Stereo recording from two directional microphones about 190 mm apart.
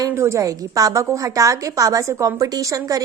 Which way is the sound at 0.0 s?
15° right (ahead or behind).